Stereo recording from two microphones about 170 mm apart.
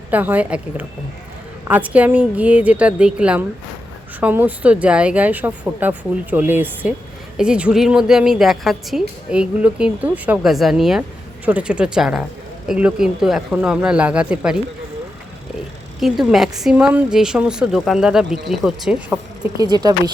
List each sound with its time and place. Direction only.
0.1 s a woman's voice: 10° right (ahead or behind)
16.0 s a woman's voice: centre (ahead or behind)
19.5 s speech: 25° right (ahead or behind)